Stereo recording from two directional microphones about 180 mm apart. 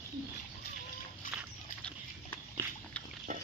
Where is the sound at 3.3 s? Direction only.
45° right (ahead or behind).